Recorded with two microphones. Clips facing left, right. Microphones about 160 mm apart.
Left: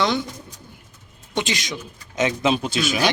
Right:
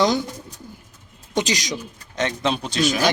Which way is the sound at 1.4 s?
40° right (ahead or behind).